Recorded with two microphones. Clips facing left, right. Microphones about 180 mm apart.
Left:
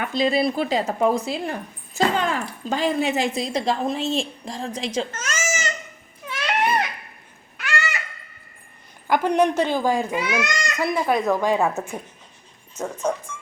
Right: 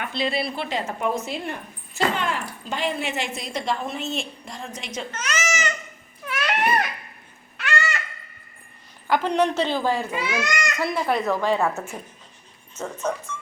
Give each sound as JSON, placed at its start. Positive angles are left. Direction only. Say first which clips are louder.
{"t": 0.1, "sound": "speech", "louder": "left 7 dB", "side_deg": 40}
{"t": 5.1, "sound": "baby cry", "louder": "even", "side_deg": 45}
{"t": 6.2, "sound": "a sound", "louder": "left 1 dB", "side_deg": 20}
{"t": 9.0, "sound": "a child's voice", "louder": "left 2 dB", "side_deg": 10}